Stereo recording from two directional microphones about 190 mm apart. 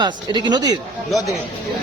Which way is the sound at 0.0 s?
25° right (ahead or behind).